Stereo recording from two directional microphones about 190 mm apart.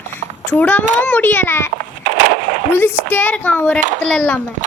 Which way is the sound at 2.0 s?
40° right (ahead or behind).